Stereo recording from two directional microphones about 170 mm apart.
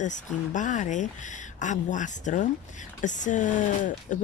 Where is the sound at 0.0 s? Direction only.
45° left (ahead or behind).